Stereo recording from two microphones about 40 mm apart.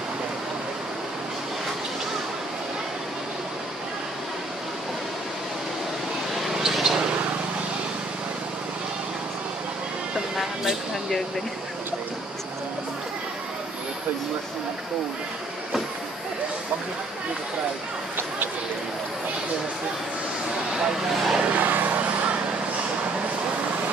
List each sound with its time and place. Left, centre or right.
6.4 s a sound: centre
10.3 s vehicle: centre
20.8 s speech: centre
21.5 s vehicle: right